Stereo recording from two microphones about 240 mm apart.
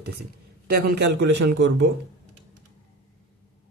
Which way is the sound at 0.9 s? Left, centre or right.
Right.